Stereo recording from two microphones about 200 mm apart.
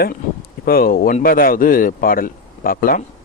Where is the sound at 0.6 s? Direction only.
45° left (ahead or behind).